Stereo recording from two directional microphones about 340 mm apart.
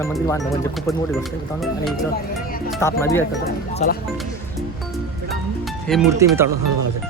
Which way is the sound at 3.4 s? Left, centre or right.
Left.